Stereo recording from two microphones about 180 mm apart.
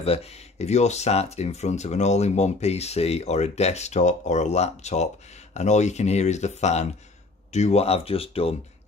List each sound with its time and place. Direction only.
0.0 s speech: 35° left (ahead or behind)